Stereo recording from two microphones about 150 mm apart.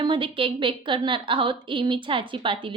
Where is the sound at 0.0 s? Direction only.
35° right (ahead or behind).